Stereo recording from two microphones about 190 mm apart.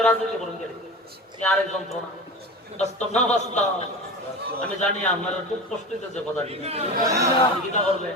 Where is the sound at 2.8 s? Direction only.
35° left (ahead or behind).